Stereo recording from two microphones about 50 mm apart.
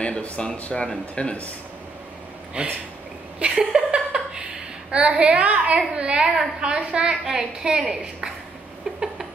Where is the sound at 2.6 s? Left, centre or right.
Right.